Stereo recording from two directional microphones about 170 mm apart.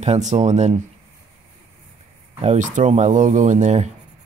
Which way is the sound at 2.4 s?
45° right (ahead or behind).